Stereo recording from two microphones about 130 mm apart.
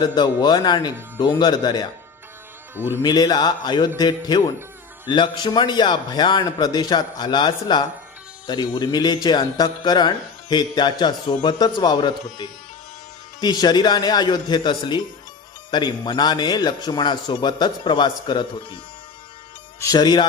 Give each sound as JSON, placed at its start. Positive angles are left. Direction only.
{"t": 0.0, "sound": "speech", "side_deg": 35}
{"t": 2.7, "sound": "speech", "side_deg": -15}
{"t": 3.0, "sound": "speech", "side_deg": 30}
{"t": 19.8, "sound": "speech", "side_deg": 30}